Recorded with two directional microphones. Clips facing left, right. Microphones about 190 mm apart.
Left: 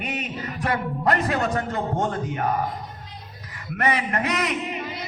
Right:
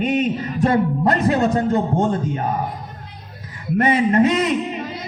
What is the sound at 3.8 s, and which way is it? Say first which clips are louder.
Speech: right 9 dB; 25° right (ahead or behind).